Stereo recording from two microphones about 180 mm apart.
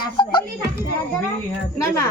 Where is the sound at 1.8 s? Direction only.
15° left (ahead or behind).